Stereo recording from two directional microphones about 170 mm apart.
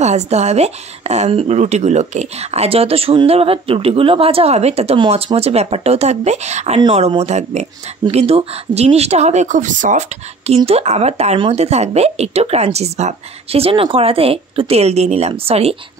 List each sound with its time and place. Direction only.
0.0 s speech: 40° right (ahead or behind)